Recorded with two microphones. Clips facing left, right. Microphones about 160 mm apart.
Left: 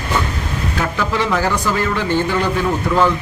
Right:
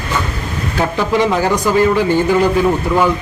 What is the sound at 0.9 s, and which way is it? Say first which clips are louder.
Speech: right 5 dB; 20° right (ahead or behind).